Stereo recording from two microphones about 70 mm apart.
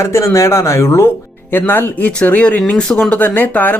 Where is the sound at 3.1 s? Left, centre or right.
Left.